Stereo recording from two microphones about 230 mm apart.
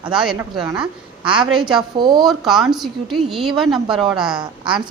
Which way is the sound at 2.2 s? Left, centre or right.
Centre.